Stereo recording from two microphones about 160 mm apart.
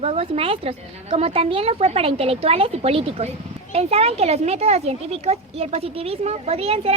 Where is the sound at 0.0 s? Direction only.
40° right (ahead or behind).